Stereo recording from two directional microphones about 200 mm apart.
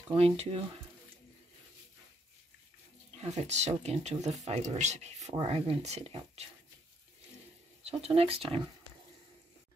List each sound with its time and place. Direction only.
0.1 s speech: 30° right (ahead or behind)
3.2 s speech: 30° right (ahead or behind)
7.8 s speech: 30° right (ahead or behind)